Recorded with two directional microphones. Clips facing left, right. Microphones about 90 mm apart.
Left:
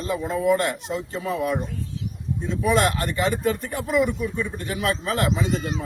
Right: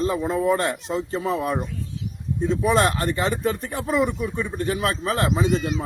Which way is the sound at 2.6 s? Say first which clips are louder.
Left 1 dB; 35° right (ahead or behind).